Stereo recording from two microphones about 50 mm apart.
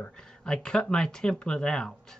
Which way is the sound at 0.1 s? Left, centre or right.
Centre.